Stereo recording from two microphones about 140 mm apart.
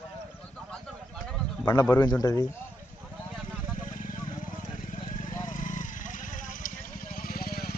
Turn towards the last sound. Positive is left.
turn(degrees=90)